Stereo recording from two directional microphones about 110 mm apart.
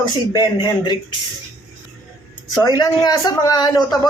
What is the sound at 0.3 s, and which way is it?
Speech, 40° left (ahead or behind).